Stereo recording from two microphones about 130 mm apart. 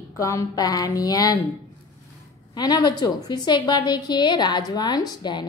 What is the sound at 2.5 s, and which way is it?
A woman's voice, 30° left (ahead or behind).